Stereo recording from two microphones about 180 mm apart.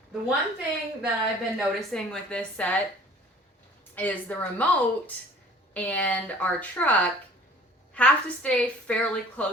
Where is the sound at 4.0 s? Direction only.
10° left (ahead or behind).